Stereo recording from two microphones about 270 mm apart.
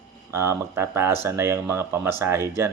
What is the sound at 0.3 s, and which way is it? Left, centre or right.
Speech, centre.